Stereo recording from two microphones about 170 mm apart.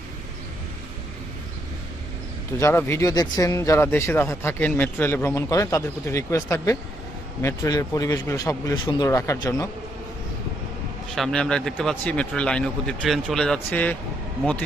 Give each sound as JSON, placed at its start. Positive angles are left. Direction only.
{"t": 2.6, "sound": "speech", "side_deg": 15}
{"t": 11.1, "sound": "a man's voice", "side_deg": 5}